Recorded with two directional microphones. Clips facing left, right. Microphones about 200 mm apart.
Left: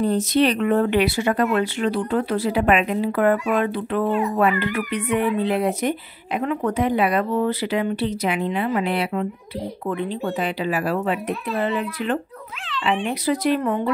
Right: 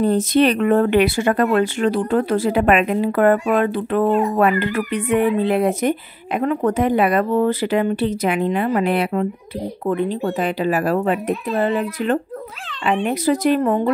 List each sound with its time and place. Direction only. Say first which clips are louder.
0.0 s speech: right 3 dB; 50° right (ahead or behind)